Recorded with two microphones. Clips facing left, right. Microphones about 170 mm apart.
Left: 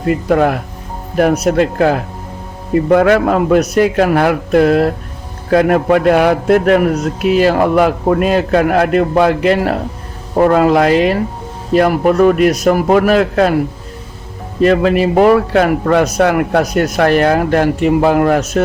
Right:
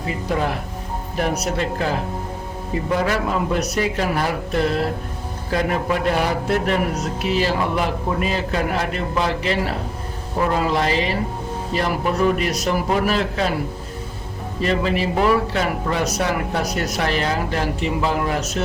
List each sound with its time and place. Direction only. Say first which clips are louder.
0.0 s a man's voice: left 10 dB; 60° left (ahead or behind)
14.6 s a man's voice: left 10 dB; 55° left (ahead or behind)